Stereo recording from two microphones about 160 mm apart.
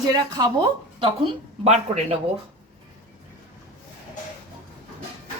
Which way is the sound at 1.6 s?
45° right (ahead or behind).